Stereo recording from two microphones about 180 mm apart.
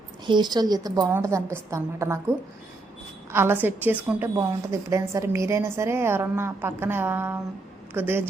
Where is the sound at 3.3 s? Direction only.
15° right (ahead or behind).